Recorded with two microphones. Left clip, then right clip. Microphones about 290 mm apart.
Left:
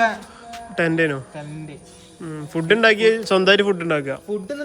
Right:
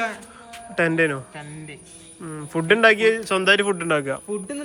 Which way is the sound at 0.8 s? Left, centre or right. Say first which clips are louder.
Even; centre.